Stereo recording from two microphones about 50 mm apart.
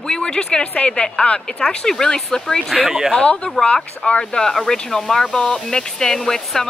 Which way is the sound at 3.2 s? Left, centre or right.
Left.